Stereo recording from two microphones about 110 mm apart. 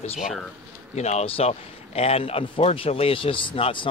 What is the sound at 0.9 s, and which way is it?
Speech, 85° left.